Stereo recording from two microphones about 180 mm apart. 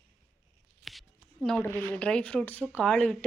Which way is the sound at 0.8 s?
Centre (ahead or behind).